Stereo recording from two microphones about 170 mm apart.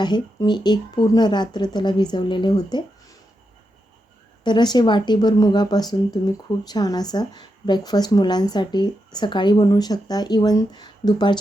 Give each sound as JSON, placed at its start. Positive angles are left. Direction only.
{"t": 0.0, "sound": "a woman's voice", "side_deg": 25}
{"t": 4.4, "sound": "a woman's voice", "side_deg": 25}